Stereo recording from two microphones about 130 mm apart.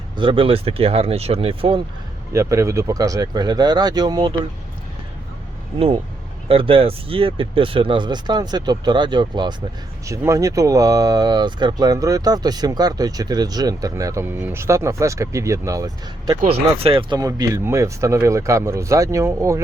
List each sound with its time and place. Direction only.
0.2 s speech: 40° right (ahead or behind)
2.3 s speech: 25° right (ahead or behind)
6.5 s speech: 45° right (ahead or behind)
10.1 s speech: 25° right (ahead or behind)
16.5 s speech: 45° right (ahead or behind)
17.2 s speech: 30° right (ahead or behind)